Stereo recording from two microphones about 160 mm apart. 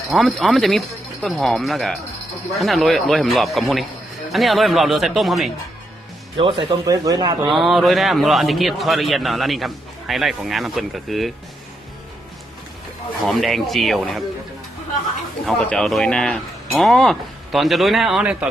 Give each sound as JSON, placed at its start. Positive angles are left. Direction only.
{"t": 0.1, "sound": "a man's voice", "side_deg": 0}
{"t": 6.3, "sound": "speech", "side_deg": -35}
{"t": 6.8, "sound": "speech", "side_deg": -20}
{"t": 7.4, "sound": "a man's voice", "side_deg": 0}
{"t": 13.2, "sound": "a man's voice", "side_deg": 0}
{"t": 15.4, "sound": "a man's voice", "side_deg": 0}